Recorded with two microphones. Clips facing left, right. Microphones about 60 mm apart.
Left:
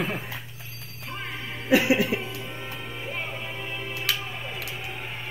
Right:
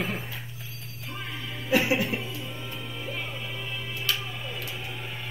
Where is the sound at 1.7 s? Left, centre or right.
Left.